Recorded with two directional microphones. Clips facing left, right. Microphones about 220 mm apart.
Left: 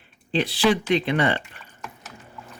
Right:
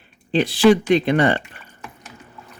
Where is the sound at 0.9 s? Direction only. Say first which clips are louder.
Right 5 dB; 45° right (ahead or behind).